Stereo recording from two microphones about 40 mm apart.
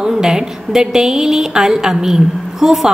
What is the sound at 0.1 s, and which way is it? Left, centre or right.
A woman's voice, centre.